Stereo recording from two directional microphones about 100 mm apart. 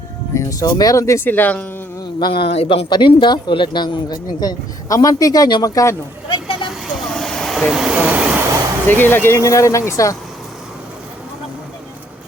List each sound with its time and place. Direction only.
0.3 s speech: 40° left (ahead or behind)
1.3 s speech: 15° left (ahead or behind)
2.1 s a man's voice: 55° left (ahead or behind); by 2.8 s 85° left
2.9 s speech: 50° left (ahead or behind); by 6.0 s 30° left (ahead or behind)
6.2 s vehicle: 55° left (ahead or behind)
6.7 s vehicle: centre (ahead or behind)
8.9 s speech: 20° left (ahead or behind)
9.4 s speech: 30° left (ahead or behind)